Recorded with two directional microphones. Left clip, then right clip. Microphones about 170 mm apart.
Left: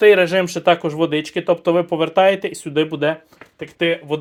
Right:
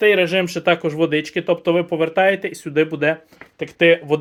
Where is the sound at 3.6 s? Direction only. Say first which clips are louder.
Right 5 dB; 30° right (ahead or behind).